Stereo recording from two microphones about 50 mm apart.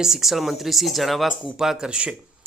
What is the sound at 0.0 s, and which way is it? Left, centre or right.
Speech, centre.